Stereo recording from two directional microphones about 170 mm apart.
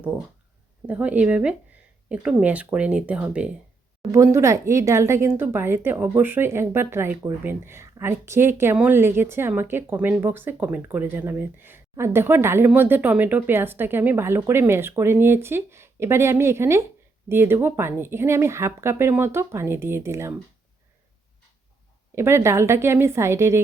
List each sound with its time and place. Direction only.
0.9 s speech: 10° right (ahead or behind)
22.1 s speech: 15° right (ahead or behind)